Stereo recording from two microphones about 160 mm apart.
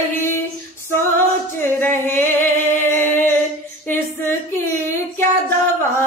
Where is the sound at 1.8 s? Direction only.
15° left (ahead or behind).